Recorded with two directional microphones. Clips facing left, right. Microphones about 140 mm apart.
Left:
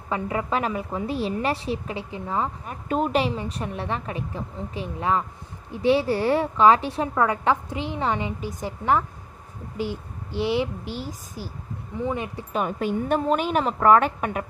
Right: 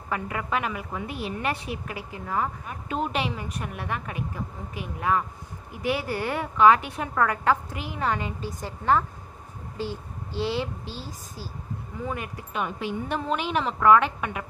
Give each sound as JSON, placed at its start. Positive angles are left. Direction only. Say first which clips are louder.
{"t": 0.1, "sound": "a woman's voice", "louder": "left 3 dB", "side_deg": 25}
{"t": 2.9, "sound": "a woman's voice", "louder": "left 5 dB", "side_deg": 40}
{"t": 7.2, "sound": "a woman's voice", "louder": "even", "side_deg": 20}
{"t": 12.5, "sound": "a woman's voice", "louder": "left 5 dB", "side_deg": 45}